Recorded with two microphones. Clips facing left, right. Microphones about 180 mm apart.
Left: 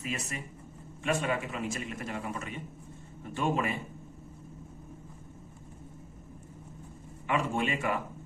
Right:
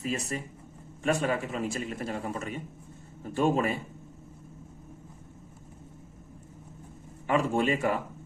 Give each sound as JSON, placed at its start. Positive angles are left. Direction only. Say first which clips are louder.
{"t": 0.0, "sound": "a man's voice", "louder": "right 5 dB", "side_deg": -35}
{"t": 7.3, "sound": "a man's voice", "louder": "right 4 dB", "side_deg": -35}